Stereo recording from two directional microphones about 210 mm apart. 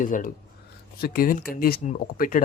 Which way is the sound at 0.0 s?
40° left (ahead or behind).